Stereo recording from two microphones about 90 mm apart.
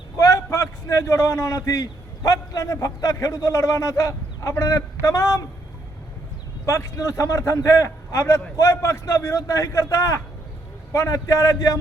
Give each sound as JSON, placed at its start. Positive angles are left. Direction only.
{"t": 0.2, "sound": "a man's voice", "side_deg": 35}
{"t": 6.7, "sound": "a man's voice", "side_deg": 35}